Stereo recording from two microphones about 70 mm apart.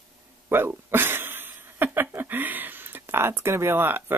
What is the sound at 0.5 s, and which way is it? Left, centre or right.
Speech, right.